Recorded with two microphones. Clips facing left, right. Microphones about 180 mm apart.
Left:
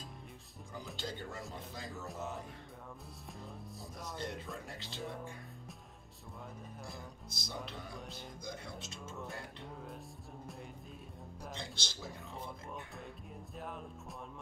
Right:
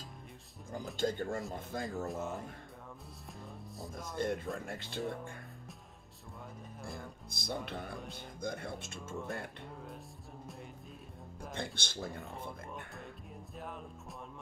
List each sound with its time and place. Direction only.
0.9 s speech: 50° right (ahead or behind)
2.0 s speech: centre (ahead or behind)
4.2 s speech: 50° right (ahead or behind)
5.0 s speech: centre (ahead or behind)
7.2 s speech: 55° right (ahead or behind)
11.5 s speech: 55° right (ahead or behind)
13.6 s speech: centre (ahead or behind)